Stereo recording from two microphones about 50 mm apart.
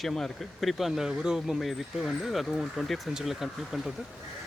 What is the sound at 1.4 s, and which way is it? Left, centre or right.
Speech, centre.